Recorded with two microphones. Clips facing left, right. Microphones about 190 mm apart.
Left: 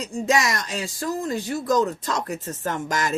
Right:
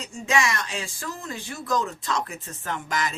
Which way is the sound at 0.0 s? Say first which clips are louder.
Left 3 dB; 40° left (ahead or behind).